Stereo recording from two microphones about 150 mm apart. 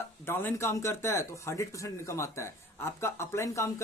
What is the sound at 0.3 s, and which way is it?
Speech, 15° left (ahead or behind).